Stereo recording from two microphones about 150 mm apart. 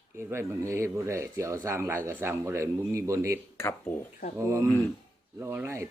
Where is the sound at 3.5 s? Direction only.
15° left (ahead or behind).